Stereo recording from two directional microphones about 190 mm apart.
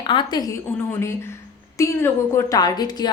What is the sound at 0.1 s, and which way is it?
A woman's voice, 25° left (ahead or behind).